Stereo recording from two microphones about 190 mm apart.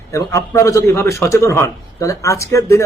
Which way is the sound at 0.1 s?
15° left (ahead or behind).